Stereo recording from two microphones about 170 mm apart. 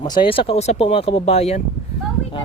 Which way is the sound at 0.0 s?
30° left (ahead or behind).